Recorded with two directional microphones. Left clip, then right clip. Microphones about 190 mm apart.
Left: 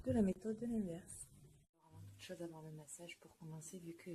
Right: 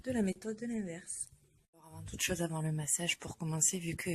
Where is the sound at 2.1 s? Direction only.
35° right (ahead or behind).